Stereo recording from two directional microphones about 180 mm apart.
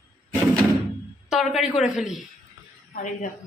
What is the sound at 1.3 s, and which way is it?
Speech, centre (ahead or behind).